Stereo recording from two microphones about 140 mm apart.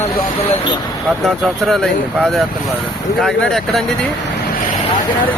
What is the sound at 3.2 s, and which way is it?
Speech, 5° left (ahead or behind).